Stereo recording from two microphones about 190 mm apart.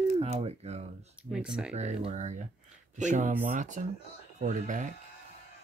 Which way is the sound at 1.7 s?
35° right (ahead or behind).